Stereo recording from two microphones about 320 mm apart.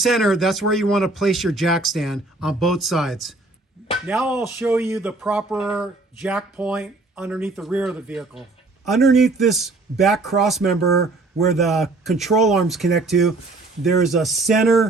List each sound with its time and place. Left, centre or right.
0.0 s speech: centre